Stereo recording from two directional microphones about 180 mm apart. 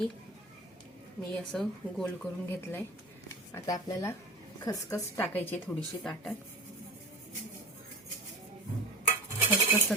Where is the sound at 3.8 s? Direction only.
15° left (ahead or behind).